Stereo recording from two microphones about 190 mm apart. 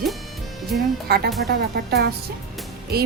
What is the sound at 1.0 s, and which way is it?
Speech, 55° right (ahead or behind).